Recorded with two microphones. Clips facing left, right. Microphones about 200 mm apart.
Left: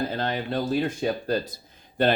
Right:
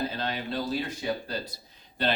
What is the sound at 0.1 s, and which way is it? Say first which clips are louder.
Speech: left 5 dB; 50° left (ahead or behind).